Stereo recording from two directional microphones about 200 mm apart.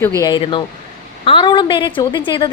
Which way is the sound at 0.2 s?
20° left (ahead or behind).